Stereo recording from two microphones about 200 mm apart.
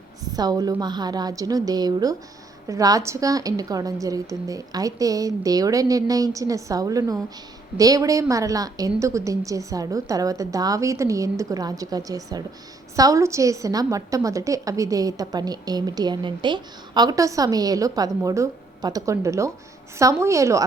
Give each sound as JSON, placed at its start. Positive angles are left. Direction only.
{"t": 0.3, "sound": "a woman's voice", "side_deg": -20}